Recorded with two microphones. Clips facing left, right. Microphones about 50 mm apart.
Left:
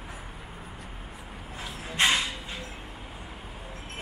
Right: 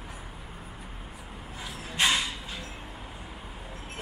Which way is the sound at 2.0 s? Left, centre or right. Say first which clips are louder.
Left 1 dB; centre.